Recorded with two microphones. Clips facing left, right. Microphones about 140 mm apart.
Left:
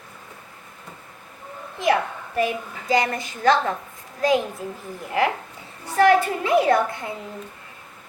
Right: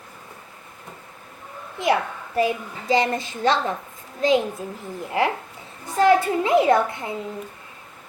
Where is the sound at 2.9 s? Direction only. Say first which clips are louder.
Right 1 dB; 25° right (ahead or behind).